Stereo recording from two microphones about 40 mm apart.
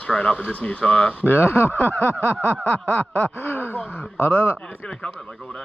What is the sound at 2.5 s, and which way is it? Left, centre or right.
Speech, left.